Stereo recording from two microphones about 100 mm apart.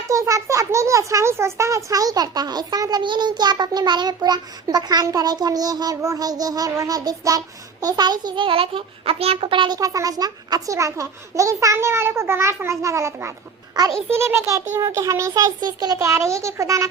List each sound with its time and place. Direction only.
0.1 s a child's voice: 30° right (ahead or behind); by 9.7 s 55° right (ahead or behind)
9.7 s a child's voice: 35° right (ahead or behind)
13.7 s a child's voice: 40° right (ahead or behind)
14.1 s a child's voice: 25° right (ahead or behind); by 16.0 s 40° right (ahead or behind)
16.0 s a child's voice: 30° right (ahead or behind)